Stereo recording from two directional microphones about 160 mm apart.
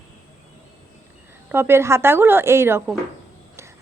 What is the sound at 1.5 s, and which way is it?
A woman's voice, 15° right (ahead or behind).